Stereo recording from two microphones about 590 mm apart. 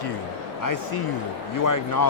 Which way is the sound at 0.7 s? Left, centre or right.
Left.